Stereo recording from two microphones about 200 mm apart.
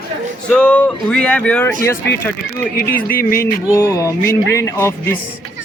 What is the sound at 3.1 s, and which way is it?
Music, 45° left (ahead or behind).